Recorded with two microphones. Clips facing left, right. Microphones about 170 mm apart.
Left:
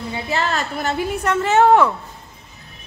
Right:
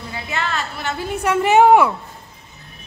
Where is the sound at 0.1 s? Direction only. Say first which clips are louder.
Left 3 dB; 35° left (ahead or behind).